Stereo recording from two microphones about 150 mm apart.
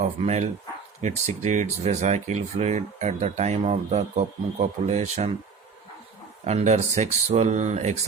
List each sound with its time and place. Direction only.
0.0 s speech: 45° right (ahead or behind)
6.4 s speech: 50° right (ahead or behind)